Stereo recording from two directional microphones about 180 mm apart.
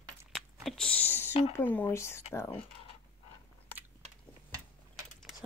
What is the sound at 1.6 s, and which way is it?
Speech, 10° left (ahead or behind).